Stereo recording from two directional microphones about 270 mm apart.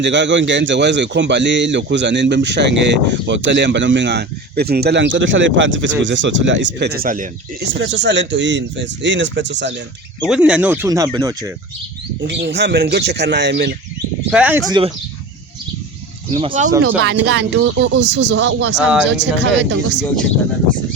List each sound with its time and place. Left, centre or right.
0.0 s a man's voice: right
7.7 s a man's voice: right
10.2 s speech: centre
12.2 s a man's voice: right
14.3 s speech: centre
16.3 s speech: right
17.0 s speech: right
18.8 s speech: centre
19.1 s a man's voice: right